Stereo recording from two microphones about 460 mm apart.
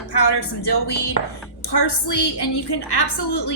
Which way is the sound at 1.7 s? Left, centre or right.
Left.